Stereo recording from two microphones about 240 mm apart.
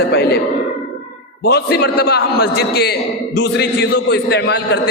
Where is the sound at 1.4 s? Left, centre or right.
Left.